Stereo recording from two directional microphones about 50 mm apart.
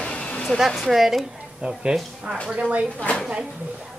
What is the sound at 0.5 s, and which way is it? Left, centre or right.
Speech, centre.